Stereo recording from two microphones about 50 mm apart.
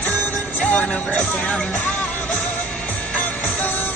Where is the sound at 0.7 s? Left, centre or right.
Left.